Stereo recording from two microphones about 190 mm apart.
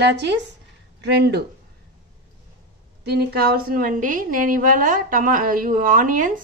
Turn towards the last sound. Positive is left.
turn(degrees=-45)  # may be behind; listen again after turning